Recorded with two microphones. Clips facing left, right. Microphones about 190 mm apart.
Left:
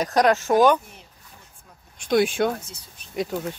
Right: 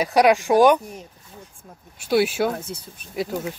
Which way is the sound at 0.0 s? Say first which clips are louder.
Right 3 dB; 10° right (ahead or behind).